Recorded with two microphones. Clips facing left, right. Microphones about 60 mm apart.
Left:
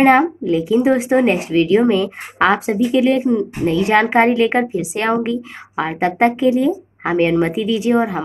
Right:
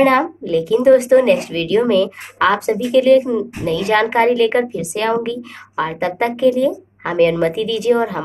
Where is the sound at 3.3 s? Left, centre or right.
Left.